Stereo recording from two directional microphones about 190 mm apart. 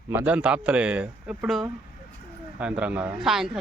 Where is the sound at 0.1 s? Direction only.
5° right (ahead or behind).